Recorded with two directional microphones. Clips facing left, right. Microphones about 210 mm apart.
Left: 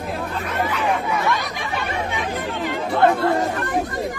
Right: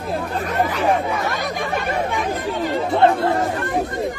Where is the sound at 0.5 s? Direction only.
40° right (ahead or behind).